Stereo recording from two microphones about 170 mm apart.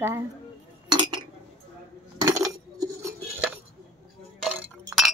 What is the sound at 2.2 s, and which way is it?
Coin, 20° right (ahead or behind).